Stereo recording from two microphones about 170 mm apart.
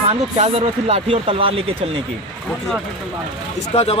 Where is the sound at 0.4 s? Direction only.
35° right (ahead or behind).